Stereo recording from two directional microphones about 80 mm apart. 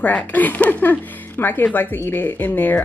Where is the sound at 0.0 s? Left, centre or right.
Left.